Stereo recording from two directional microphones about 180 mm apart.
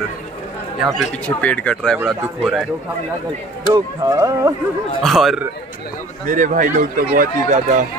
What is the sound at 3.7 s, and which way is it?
Speech, 20° right (ahead or behind).